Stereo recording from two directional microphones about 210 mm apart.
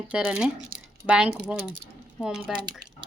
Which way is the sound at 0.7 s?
45° right (ahead or behind).